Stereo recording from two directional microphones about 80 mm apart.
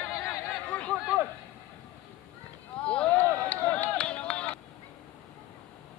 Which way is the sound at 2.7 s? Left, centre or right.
Centre.